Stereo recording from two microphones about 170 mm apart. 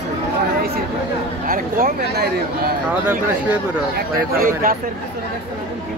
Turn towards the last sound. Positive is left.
turn(degrees=-55)  # may be behind; listen again after turning